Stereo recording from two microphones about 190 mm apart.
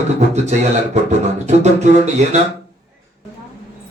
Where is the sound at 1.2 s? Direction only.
35° right (ahead or behind).